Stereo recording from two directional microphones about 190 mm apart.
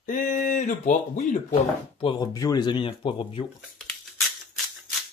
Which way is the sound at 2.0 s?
20° left (ahead or behind).